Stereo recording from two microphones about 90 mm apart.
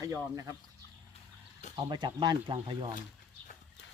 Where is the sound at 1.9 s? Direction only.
55° right (ahead or behind).